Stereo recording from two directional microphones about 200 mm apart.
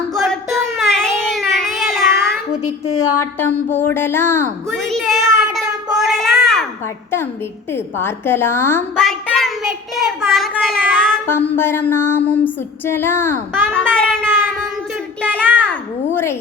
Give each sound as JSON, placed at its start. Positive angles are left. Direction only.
{"t": 0.1, "sound": "a sound", "side_deg": 0}
{"t": 2.9, "sound": "speech", "side_deg": 90}
{"t": 3.3, "sound": "a woman's voice", "side_deg": 10}
{"t": 4.8, "sound": "child singing", "side_deg": 0}
{"t": 7.7, "sound": "a woman's voice", "side_deg": 10}
{"t": 9.0, "sound": "a child's voice", "side_deg": 0}